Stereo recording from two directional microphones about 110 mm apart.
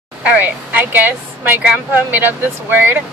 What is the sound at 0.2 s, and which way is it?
A woman's voice, 15° right (ahead or behind).